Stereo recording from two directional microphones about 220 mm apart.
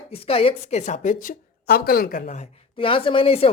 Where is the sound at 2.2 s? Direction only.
30° left (ahead or behind).